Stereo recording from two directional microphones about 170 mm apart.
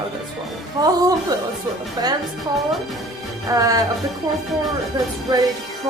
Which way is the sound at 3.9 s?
Centre (ahead or behind).